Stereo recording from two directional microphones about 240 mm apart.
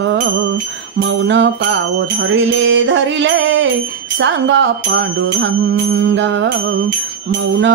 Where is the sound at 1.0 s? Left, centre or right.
Right.